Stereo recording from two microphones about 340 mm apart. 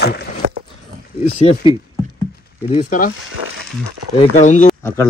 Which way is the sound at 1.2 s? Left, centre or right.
Centre.